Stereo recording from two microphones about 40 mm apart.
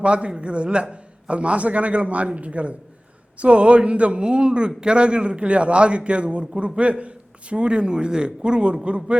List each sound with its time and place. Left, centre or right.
0.0 s a man's voice: right